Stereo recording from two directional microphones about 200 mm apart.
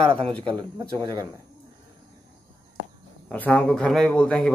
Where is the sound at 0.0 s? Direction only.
25° right (ahead or behind).